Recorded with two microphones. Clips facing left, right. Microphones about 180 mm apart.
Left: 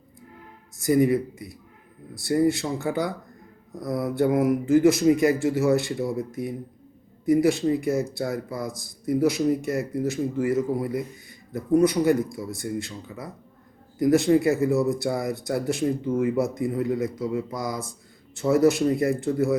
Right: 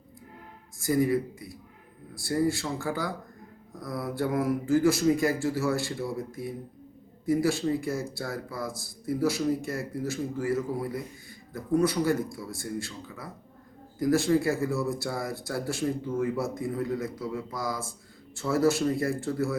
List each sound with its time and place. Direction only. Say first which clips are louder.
0.8 s speech: left 5 dB; 20° left (ahead or behind)